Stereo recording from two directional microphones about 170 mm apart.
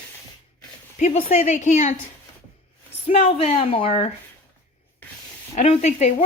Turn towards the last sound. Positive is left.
turn(degrees=40)  # may be behind; listen again after turning